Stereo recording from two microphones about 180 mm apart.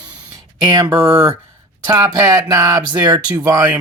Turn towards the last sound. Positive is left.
turn(degrees=-20)  # may be behind; listen again after turning